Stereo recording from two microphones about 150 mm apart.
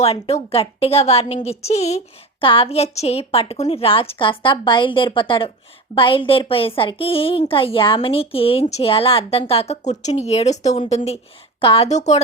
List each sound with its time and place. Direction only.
0.0 s a woman's voice: 45° left (ahead or behind)
11.9 s a woman's voice: 50° left (ahead or behind)